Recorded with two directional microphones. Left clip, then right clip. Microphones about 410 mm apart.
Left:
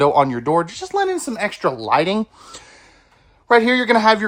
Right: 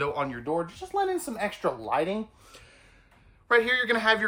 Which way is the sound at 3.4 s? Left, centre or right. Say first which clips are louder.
Left 9 dB; centre.